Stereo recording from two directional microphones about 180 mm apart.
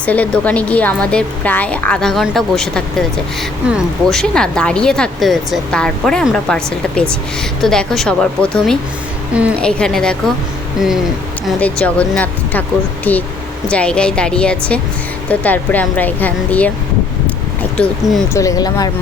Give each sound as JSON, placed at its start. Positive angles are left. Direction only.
{"t": 0.0, "sound": "speech", "side_deg": 10}
{"t": 9.3, "sound": "a woman's voice", "side_deg": -5}
{"t": 9.6, "sound": "speech", "side_deg": 5}
{"t": 11.4, "sound": "speech", "side_deg": 5}
{"t": 17.2, "sound": "a sound", "side_deg": 5}
{"t": 18.3, "sound": "speech", "side_deg": 20}